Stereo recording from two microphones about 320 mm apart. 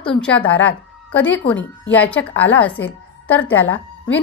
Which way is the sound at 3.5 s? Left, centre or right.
Centre.